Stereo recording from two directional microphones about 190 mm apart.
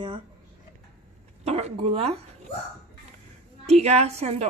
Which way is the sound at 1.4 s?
35° right (ahead or behind).